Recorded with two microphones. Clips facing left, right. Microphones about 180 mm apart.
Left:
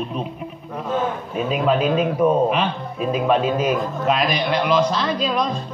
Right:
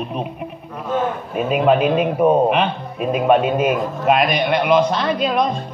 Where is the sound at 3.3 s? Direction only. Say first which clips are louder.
Right 4 dB; 60° right (ahead or behind).